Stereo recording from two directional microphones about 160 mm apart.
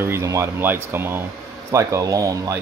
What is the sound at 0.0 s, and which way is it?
Speech, 15° right (ahead or behind).